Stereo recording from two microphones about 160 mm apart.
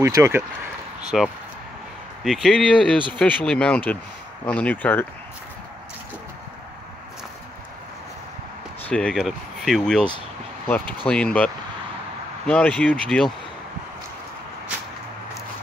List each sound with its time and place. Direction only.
0.0 s speech: 15° right (ahead or behind)
1.1 s speech: centre (ahead or behind)
8.8 s speech: 5° left (ahead or behind)